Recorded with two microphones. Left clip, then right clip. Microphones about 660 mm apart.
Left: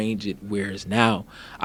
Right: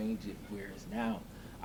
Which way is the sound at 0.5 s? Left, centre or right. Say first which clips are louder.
Left 18 dB; left.